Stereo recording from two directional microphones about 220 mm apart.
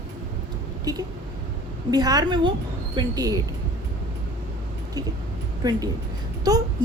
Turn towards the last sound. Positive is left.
turn(degrees=-15)  # may be behind; listen again after turning